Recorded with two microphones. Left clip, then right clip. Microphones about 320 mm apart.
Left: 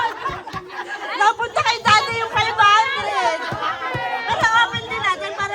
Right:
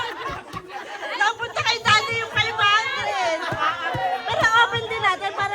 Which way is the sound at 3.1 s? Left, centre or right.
Centre.